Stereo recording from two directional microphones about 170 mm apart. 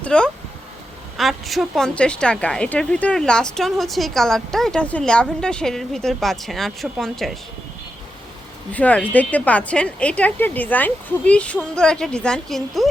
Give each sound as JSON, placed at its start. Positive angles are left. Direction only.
{"t": 0.0, "sound": "speech", "side_deg": 5}
{"t": 8.7, "sound": "a woman's voice", "side_deg": 10}